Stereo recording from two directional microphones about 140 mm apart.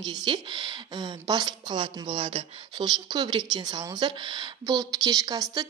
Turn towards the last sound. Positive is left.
turn(degrees=-25)  # may be behind; listen again after turning